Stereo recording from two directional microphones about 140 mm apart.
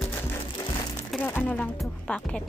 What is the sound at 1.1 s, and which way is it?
Music, 15° left (ahead or behind).